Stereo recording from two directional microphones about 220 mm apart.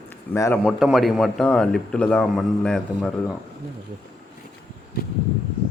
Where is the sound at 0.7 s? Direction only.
Centre (ahead or behind).